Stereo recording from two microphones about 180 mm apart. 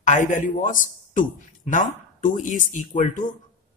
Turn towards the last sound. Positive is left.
turn(degrees=45)  # may be behind; listen again after turning